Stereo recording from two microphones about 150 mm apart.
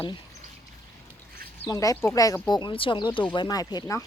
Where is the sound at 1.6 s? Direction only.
25° left (ahead or behind).